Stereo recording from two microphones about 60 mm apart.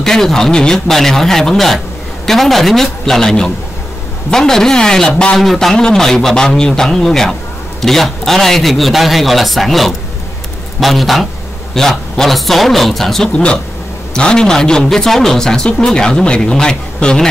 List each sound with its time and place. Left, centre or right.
0.0 s a man's voice: centre
13.3 s a man's voice: centre